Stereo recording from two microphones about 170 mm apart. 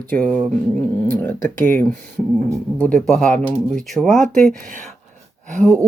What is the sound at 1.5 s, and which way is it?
Speech, 10° left (ahead or behind).